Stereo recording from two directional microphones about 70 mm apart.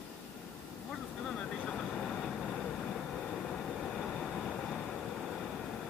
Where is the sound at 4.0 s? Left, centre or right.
Centre.